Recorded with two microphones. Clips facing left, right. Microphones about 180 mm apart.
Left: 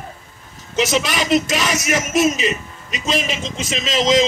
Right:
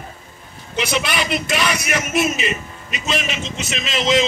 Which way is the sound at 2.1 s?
40° left (ahead or behind).